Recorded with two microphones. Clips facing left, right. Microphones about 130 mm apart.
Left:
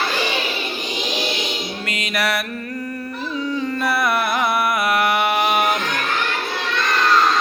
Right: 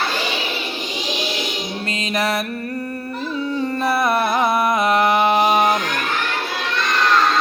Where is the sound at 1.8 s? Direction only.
25° right (ahead or behind).